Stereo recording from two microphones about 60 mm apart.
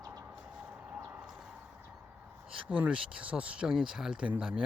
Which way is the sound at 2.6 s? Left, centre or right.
Centre.